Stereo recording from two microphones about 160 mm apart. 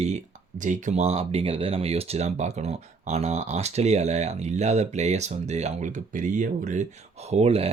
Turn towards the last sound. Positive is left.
turn(degrees=-40)  # may be behind; listen again after turning